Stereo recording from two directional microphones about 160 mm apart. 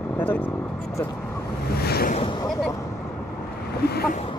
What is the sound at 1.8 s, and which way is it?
Waves, 80° left.